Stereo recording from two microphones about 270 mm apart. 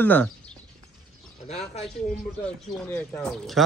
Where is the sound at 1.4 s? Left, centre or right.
Left.